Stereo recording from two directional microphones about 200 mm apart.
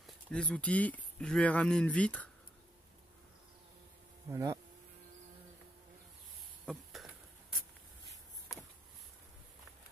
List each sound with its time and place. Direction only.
0.0 s speech: 5° left (ahead or behind)
4.3 s speech: 15° right (ahead or behind)
6.6 s a sound: centre (ahead or behind)